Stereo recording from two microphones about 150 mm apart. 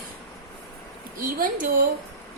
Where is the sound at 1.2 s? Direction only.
65° right (ahead or behind).